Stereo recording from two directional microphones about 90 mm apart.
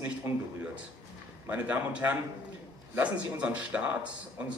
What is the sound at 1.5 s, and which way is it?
Speech, 15° right (ahead or behind).